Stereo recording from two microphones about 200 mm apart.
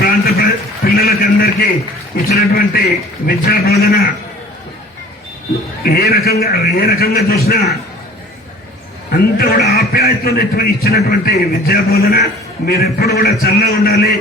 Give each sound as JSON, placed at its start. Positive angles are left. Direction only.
{"t": 0.0, "sound": "a sound", "side_deg": 50}
{"t": 2.1, "sound": "a man's voice", "side_deg": 50}
{"t": 5.8, "sound": "a man's voice", "side_deg": 50}
{"t": 9.0, "sound": "a man's voice", "side_deg": 50}